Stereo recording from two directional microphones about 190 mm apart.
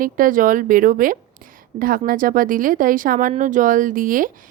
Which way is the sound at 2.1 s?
45° right (ahead or behind).